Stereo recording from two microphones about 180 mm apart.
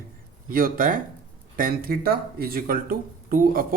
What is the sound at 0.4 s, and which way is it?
Speech, 50° right (ahead or behind).